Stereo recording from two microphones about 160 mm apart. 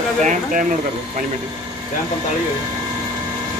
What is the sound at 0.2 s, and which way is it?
Speech, 50° right (ahead or behind).